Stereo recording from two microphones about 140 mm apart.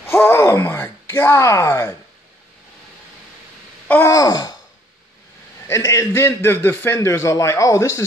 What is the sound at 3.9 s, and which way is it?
Wail, 20° left (ahead or behind).